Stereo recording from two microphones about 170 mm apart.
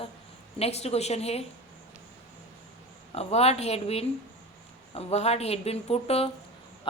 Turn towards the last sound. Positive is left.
turn(degrees=35)  # may be behind; listen again after turning